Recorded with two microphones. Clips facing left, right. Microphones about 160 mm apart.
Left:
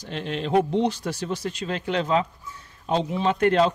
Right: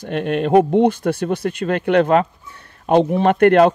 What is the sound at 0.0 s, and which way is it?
Speech, 55° right (ahead or behind).